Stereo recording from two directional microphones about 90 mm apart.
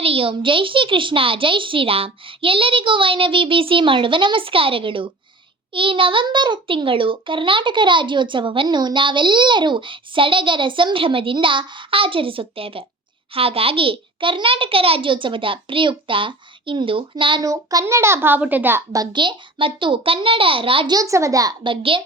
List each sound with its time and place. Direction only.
0.0 s a child's voice: 90° right; by 17.4 s 70° right (ahead or behind)
17.4 s a child's voice: 40° right (ahead or behind)
17.8 s a child's voice: 30° right (ahead or behind)
19.1 s a child's voice: 60° right (ahead or behind); by 20.8 s 80° right
20.8 s a child's voice: 40° right (ahead or behind)
21.6 s a child's voice: 70° right (ahead or behind)